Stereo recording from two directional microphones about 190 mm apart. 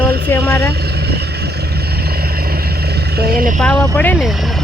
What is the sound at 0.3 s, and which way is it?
Speech, 10° left (ahead or behind).